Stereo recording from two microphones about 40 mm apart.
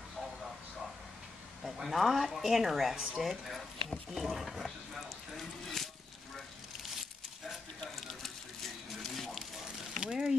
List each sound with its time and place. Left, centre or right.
1.6 s speech: centre
7.4 s a sound: centre
9.9 s speech: centre